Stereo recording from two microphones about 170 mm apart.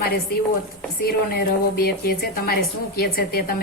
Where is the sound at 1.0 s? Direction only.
65° left (ahead or behind).